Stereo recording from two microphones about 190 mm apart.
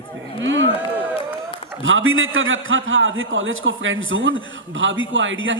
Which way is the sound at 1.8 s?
90° right.